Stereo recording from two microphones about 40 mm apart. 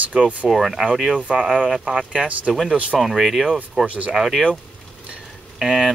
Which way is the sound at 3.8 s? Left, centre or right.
Right.